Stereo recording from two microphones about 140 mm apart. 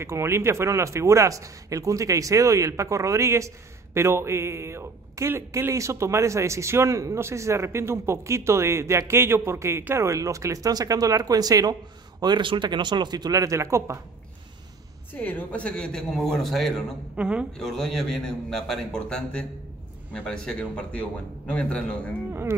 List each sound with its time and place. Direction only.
0.0 s speech: 20° right (ahead or behind)
15.1 s a man's voice: 10° left (ahead or behind); by 17.5 s 10° right (ahead or behind)
17.5 s a man's voice: 5° left (ahead or behind)
22.3 s speech: 15° right (ahead or behind)